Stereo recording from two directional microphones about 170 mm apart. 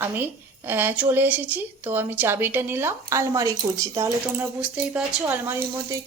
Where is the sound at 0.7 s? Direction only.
10° right (ahead or behind).